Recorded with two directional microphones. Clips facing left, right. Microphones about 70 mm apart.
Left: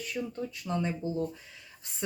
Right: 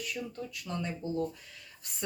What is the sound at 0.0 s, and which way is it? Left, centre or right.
Speech, left.